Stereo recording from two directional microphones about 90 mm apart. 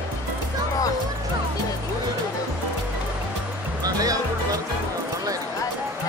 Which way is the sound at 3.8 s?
45° right (ahead or behind).